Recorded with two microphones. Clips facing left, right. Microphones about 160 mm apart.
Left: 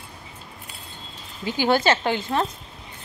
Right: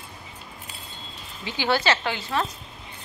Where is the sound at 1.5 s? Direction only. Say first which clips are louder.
Left 4 dB; 45° left (ahead or behind).